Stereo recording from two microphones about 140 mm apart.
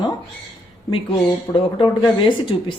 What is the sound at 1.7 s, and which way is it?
Speech, 35° left (ahead or behind).